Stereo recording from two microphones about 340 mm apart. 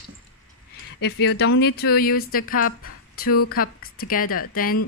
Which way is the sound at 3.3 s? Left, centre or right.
Left.